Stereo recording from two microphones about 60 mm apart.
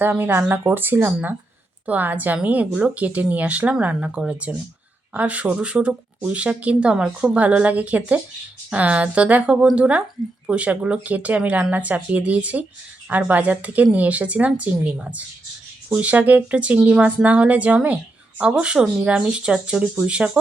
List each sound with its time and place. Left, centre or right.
0.0 s speech: right; by 7.3 s centre
7.3 s speech: right